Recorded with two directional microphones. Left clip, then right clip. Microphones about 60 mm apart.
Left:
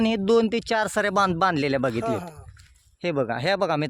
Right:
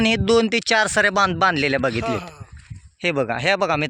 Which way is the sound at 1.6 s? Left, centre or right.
Centre.